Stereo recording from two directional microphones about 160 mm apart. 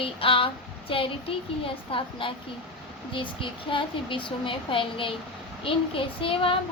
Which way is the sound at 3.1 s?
30° left (ahead or behind).